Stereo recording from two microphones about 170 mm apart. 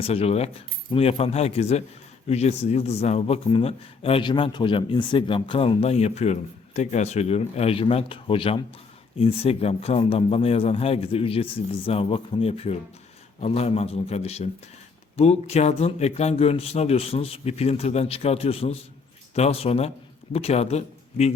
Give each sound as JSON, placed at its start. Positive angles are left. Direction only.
{"t": 0.0, "sound": "a man's voice", "side_deg": 35}